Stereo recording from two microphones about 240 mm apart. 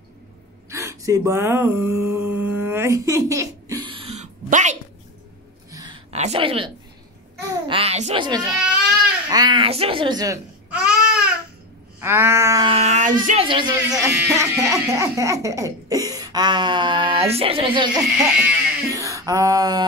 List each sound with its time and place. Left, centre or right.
0.7 s speech: centre; by 4.7 s right
5.7 s a sound: centre
6.1 s a woman's voice: right
8.5 s goat: centre
9.3 s babbling: centre
12.0 s speech: centre; by 13.4 s right
13.4 s speech: centre
17.9 s speech: centre